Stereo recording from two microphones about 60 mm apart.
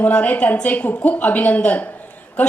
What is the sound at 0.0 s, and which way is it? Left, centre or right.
A woman's voice, left.